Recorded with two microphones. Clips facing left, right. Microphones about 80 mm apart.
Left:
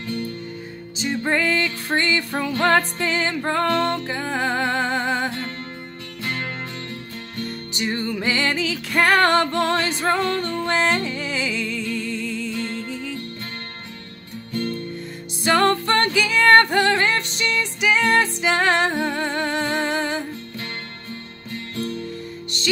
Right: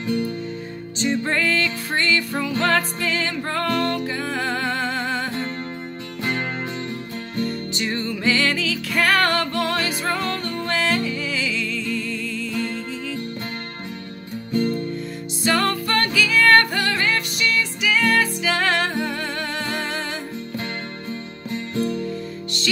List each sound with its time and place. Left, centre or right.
0.0 s music: centre
0.9 s music: centre
7.7 s music: centre
14.5 s guitar: centre
15.4 s music: left
21.5 s music: right